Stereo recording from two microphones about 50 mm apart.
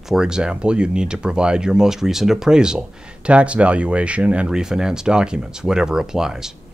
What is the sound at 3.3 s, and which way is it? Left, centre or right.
Speech, right.